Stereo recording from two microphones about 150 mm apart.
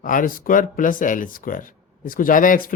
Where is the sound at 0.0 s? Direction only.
60° left (ahead or behind).